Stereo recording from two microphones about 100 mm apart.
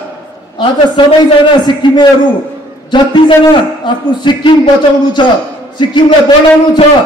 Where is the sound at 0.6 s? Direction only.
55° left (ahead or behind).